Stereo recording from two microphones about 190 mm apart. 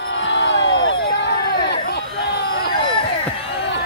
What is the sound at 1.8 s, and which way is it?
Hubbub, 60° left (ahead or behind).